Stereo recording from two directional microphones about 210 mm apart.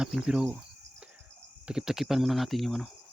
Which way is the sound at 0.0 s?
5° right (ahead or behind).